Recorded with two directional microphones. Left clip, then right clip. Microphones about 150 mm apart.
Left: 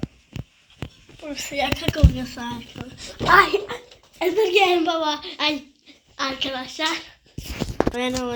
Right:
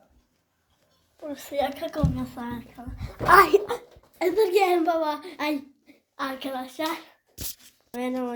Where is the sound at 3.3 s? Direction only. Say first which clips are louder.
Left 1 dB; 40° right (ahead or behind).